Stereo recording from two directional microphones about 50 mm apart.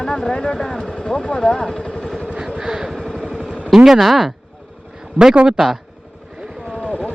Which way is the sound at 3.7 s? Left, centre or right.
Centre.